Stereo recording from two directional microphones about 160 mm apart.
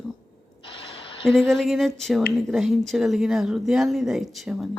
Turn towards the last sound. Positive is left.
turn(degrees=0)  # may be behind; listen again after turning